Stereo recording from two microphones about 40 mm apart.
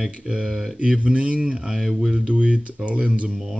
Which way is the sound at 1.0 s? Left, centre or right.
Right.